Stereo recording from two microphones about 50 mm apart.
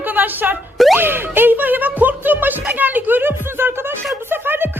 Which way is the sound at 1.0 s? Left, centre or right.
Right.